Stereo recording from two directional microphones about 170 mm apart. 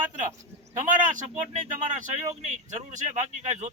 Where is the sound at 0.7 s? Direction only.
50° right (ahead or behind).